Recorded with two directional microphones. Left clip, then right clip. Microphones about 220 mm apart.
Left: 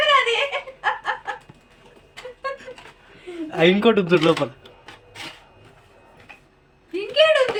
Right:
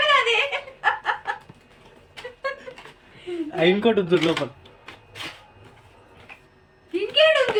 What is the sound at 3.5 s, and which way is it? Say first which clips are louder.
Speech: left 3 dB; 25° left (ahead or behind).